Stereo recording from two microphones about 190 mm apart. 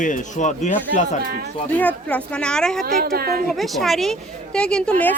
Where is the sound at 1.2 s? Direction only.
55° right (ahead or behind).